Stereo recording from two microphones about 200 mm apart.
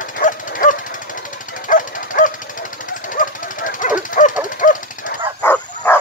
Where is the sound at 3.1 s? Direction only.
40° left (ahead or behind).